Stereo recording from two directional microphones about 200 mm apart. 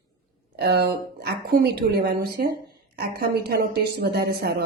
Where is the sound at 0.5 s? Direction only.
55° right (ahead or behind).